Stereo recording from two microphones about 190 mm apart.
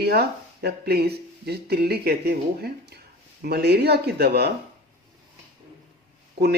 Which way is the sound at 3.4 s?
55° right (ahead or behind).